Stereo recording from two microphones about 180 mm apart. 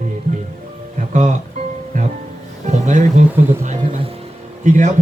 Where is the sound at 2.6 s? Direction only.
40° right (ahead or behind).